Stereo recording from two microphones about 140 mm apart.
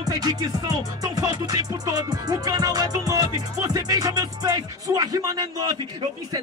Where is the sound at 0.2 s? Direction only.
30° right (ahead or behind).